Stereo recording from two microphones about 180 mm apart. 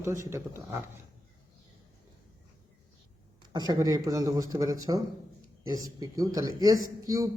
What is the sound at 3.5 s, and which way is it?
A man's voice, 25° right (ahead or behind).